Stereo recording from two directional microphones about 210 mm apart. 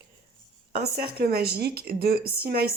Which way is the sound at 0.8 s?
50° right (ahead or behind).